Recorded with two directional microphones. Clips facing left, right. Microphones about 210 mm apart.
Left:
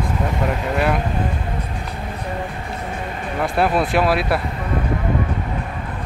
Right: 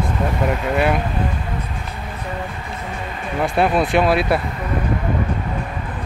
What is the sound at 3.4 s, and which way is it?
Speech, centre (ahead or behind).